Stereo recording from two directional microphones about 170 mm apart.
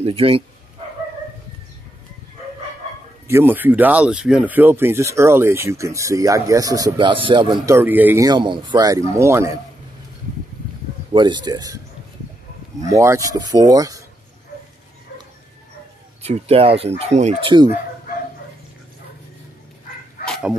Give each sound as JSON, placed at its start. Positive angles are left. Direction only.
{"t": 0.0, "sound": "speech", "side_deg": -35}
{"t": 3.3, "sound": "speech", "side_deg": -15}
{"t": 7.6, "sound": "speech", "side_deg": -15}
{"t": 8.3, "sound": "speech", "side_deg": -25}
{"t": 11.1, "sound": "speech", "side_deg": -25}
{"t": 12.9, "sound": "speech", "side_deg": -15}
{"t": 16.2, "sound": "speech", "side_deg": -35}
{"t": 20.2, "sound": "dog", "side_deg": 0}